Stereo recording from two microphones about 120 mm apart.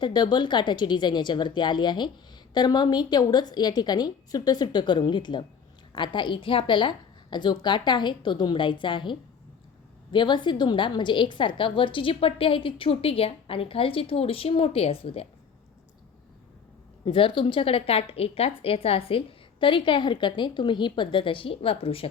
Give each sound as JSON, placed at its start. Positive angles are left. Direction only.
{"t": 0.0, "sound": "a woman's voice", "side_deg": 40}
{"t": 17.1, "sound": "a woman's voice", "side_deg": 45}